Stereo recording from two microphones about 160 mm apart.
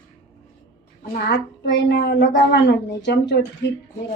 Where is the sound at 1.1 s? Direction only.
90° left.